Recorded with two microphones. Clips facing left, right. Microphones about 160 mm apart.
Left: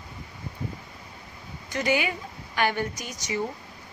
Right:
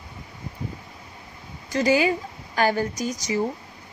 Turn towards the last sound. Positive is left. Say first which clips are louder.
# right 7 dB
turn(degrees=-35)  # may be behind; listen again after turning